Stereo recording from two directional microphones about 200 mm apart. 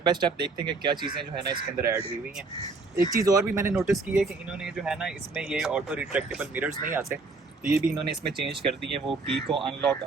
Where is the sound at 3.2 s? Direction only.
15° right (ahead or behind).